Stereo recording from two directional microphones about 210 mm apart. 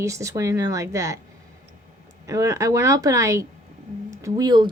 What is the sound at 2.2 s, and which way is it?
Speech, 15° right (ahead or behind).